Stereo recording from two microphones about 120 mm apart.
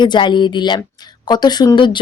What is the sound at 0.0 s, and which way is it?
Speech, 40° left (ahead or behind).